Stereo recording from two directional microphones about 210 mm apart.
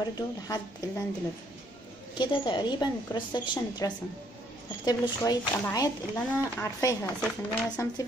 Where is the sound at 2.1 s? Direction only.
20° left (ahead or behind).